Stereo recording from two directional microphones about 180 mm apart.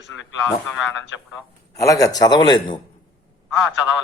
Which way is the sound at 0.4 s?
Centre (ahead or behind).